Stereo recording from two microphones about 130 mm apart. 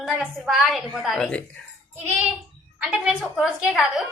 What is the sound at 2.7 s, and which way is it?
A woman's voice, 5° right (ahead or behind).